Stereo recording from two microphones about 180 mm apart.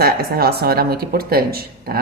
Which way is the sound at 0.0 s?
60° right (ahead or behind).